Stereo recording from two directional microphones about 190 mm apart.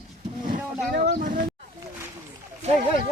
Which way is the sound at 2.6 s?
35° right (ahead or behind).